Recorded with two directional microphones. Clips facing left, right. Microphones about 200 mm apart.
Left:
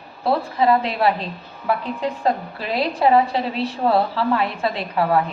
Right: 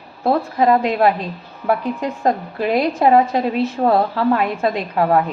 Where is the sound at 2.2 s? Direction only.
50° right (ahead or behind).